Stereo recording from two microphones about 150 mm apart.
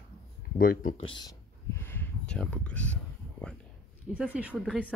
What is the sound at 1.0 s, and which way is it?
Speech, 30° left (ahead or behind).